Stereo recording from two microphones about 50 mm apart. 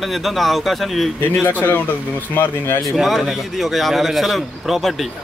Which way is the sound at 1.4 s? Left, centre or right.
Left.